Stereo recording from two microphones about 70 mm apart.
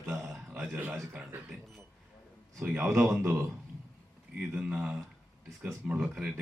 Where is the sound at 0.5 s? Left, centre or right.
Right.